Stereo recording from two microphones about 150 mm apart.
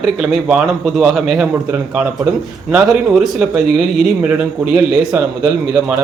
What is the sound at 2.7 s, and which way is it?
Speech, 5° right (ahead or behind).